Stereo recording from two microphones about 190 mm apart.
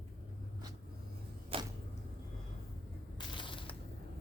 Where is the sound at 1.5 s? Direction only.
30° right (ahead or behind).